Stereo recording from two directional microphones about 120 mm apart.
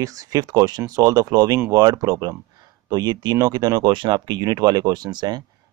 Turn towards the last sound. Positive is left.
turn(degrees=-35)  # may be behind; listen again after turning